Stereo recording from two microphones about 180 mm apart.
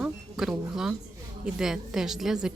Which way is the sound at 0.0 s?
5° right (ahead or behind).